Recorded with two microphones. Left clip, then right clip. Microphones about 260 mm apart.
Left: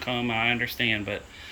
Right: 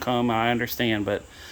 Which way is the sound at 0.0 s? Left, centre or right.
Right.